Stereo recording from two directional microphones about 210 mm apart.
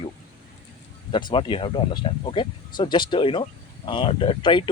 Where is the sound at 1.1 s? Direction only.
20° left (ahead or behind).